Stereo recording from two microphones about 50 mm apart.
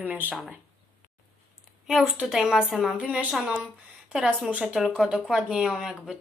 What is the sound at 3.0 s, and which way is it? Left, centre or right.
Speech, right.